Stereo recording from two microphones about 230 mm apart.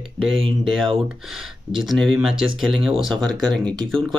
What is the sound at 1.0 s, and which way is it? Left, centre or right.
Speech, centre.